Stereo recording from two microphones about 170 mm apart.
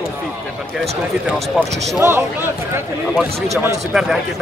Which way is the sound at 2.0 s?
15° right (ahead or behind).